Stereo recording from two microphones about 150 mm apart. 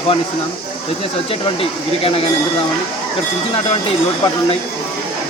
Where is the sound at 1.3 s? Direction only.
40° left (ahead or behind).